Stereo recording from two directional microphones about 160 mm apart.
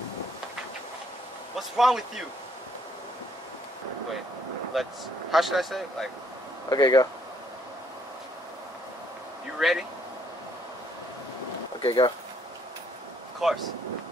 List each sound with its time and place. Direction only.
1.6 s speech: centre (ahead or behind)
4.7 s speech: centre (ahead or behind)
6.7 s speech: 25° left (ahead or behind)
9.6 s speech: centre (ahead or behind)
11.8 s speech: 35° left (ahead or behind)
13.4 s speech: centre (ahead or behind)